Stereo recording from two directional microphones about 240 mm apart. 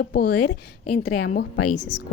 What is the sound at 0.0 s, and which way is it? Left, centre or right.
Speech, left.